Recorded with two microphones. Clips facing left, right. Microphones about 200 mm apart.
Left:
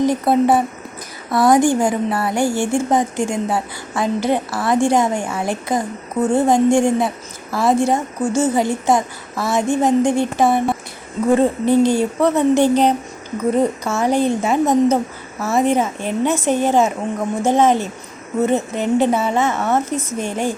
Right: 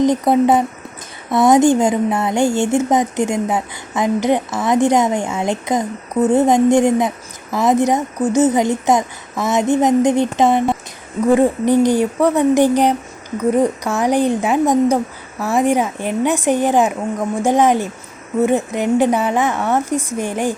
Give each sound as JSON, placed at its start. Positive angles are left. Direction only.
{"t": 0.0, "sound": "a woman's voice", "side_deg": -20}